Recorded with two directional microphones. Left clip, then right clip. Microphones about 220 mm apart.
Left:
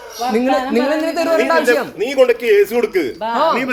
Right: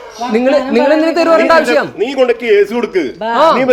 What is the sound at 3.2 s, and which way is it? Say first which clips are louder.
Speech: right 7 dB; 40° right (ahead or behind).